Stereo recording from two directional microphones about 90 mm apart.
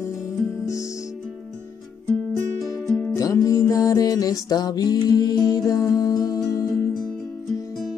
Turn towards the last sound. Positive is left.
turn(degrees=40)  # may be behind; listen again after turning